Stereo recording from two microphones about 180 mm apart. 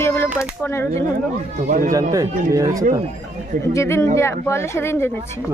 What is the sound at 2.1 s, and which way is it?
Speech, 20° right (ahead or behind).